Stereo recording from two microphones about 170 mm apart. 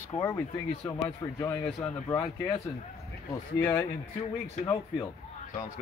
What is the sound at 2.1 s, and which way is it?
Speech, 20° left (ahead or behind).